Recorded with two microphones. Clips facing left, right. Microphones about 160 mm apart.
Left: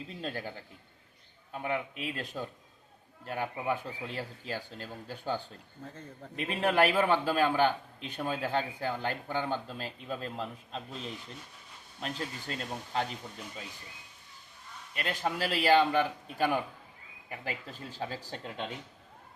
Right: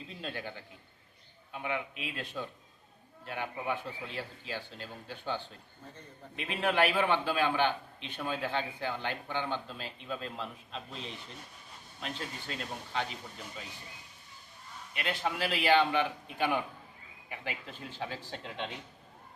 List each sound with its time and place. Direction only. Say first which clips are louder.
0.2 s a man's voice: left 2 dB; 40° left (ahead or behind)
12.0 s a man's voice: left 3 dB; 40° left (ahead or behind)
14.9 s a man's voice: left 1 dB; 40° left (ahead or behind)